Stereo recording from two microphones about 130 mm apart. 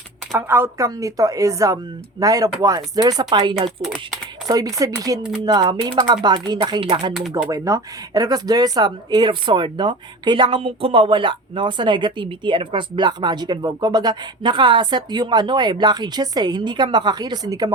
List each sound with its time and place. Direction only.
0.3 s speech: 20° right (ahead or behind); by 7.1 s 40° right (ahead or behind)
7.1 s speech: centre (ahead or behind)
7.5 s speech: 25° right (ahead or behind)